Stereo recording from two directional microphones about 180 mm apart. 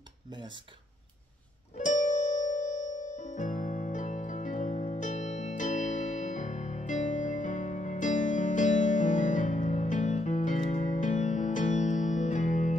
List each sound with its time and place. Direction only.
0.3 s speech: 25° right (ahead or behind)
1.8 s music: 45° left (ahead or behind)